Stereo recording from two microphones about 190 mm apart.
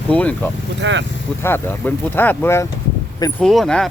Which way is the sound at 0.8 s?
70° right (ahead or behind).